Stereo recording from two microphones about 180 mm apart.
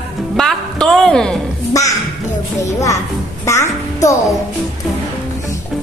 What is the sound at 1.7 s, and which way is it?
A child's voice, 20° left (ahead or behind).